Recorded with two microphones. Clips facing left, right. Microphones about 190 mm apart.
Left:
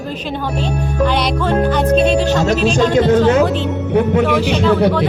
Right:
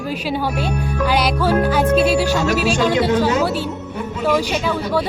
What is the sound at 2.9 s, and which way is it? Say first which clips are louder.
Speech: left 6 dB; 45° left (ahead or behind).